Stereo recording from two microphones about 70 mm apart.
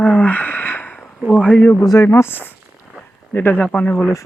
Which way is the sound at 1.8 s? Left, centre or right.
Left.